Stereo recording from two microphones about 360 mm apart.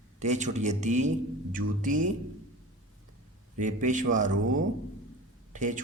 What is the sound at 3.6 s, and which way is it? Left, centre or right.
Speech, right.